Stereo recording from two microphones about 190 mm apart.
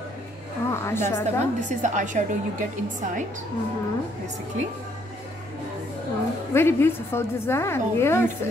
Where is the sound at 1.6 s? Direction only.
40° right (ahead or behind).